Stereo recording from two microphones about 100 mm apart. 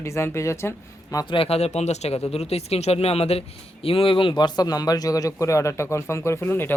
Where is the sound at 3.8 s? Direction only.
65° left (ahead or behind); by 6.7 s 20° left (ahead or behind).